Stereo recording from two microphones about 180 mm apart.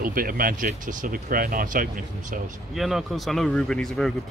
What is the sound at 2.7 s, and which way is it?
Speech, centre (ahead or behind).